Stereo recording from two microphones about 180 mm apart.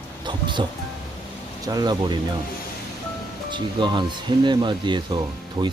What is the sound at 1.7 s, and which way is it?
Speech, 20° right (ahead or behind).